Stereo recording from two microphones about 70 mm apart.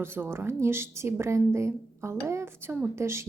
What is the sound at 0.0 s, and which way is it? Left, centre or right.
A woman's voice, right.